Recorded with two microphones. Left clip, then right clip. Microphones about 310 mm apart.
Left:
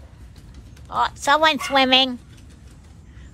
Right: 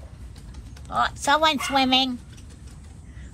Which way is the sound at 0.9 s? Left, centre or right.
Centre.